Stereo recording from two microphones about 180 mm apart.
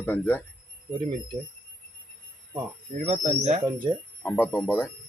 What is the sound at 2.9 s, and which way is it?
Speech, 40° right (ahead or behind).